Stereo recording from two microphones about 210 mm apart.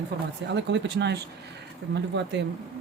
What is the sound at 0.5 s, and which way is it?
Speech, 55° right (ahead or behind).